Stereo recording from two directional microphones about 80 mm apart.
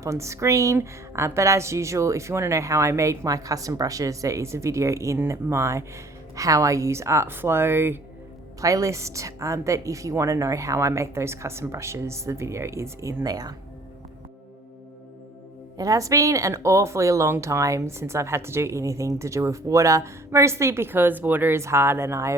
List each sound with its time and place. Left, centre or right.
0.0 s a woman's voice: right
8.6 s a woman's voice: right
13.2 s speech: right
15.8 s a woman's voice: right